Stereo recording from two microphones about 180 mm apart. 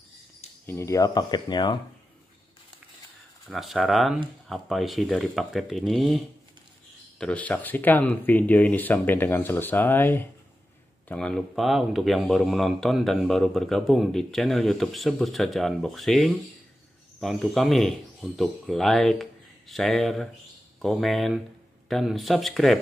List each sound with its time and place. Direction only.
0.7 s speech: 15° left (ahead or behind)
3.4 s speech: centre (ahead or behind)